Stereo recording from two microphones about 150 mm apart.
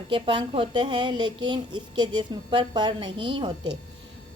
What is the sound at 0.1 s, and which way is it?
A woman's voice, 35° right (ahead or behind).